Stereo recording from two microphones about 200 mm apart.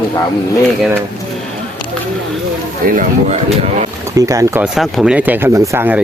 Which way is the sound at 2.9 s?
40° right (ahead or behind).